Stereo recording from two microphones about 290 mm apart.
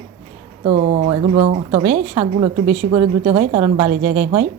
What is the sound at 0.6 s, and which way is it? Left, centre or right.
A woman's voice, right.